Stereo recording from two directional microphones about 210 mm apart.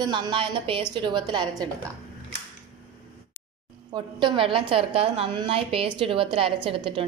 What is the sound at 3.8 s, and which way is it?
A woman's voice, 20° right (ahead or behind).